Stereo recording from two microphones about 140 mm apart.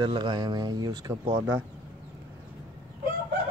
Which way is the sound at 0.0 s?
35° right (ahead or behind).